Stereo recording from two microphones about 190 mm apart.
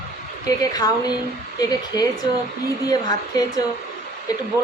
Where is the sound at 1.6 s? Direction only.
20° left (ahead or behind).